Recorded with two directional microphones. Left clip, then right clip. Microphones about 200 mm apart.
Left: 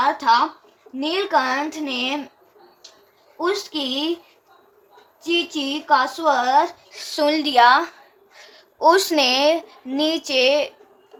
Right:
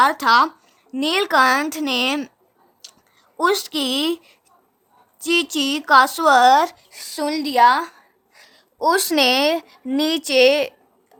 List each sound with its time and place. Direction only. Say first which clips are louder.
0.0 s a woman's voice: right 3 dB; 60° right (ahead or behind)
3.3 s a woman's voice: right 4 dB; 60° right (ahead or behind)
5.2 s a woman's voice: right 3 dB; 60° right (ahead or behind)
6.9 s a woman's voice: left 4 dB; 25° right (ahead or behind)